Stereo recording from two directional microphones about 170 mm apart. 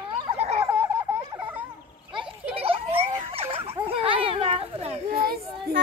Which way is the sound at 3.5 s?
35° right (ahead or behind).